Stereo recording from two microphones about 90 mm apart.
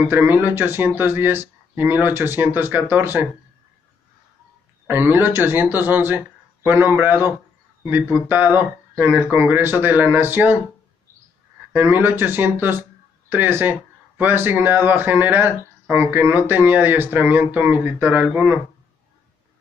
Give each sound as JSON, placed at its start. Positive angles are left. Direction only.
{"t": 0.0, "sound": "speech", "side_deg": -25}
{"t": 4.8, "sound": "speech", "side_deg": -20}
{"t": 11.7, "sound": "speech", "side_deg": -20}